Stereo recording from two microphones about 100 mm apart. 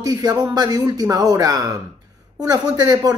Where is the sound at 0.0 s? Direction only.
40° right (ahead or behind).